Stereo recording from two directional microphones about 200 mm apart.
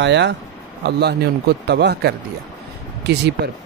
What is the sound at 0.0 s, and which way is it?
Speech, 60° right (ahead or behind).